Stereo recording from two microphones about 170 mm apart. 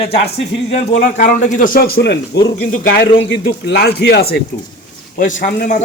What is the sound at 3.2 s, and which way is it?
A man's voice, 80° left.